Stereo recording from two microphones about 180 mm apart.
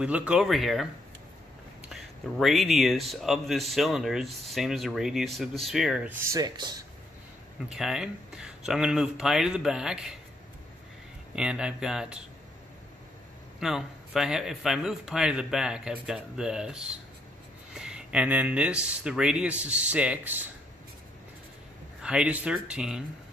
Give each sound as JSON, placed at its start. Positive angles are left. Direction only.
{"t": 0.0, "sound": "speech", "side_deg": -5}
{"t": 1.9, "sound": "speech", "side_deg": 0}
{"t": 6.2, "sound": "speech", "side_deg": -20}
{"t": 7.7, "sound": "speech", "side_deg": -5}
{"t": 11.3, "sound": "speech", "side_deg": -5}
{"t": 13.6, "sound": "speech", "side_deg": 0}
{"t": 22.0, "sound": "speech", "side_deg": -5}